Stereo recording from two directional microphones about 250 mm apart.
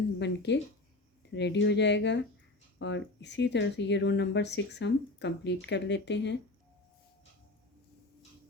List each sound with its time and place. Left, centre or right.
0.2 s speech: left